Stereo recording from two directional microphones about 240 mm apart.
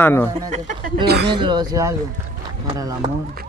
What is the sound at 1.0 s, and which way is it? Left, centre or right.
Speech, right.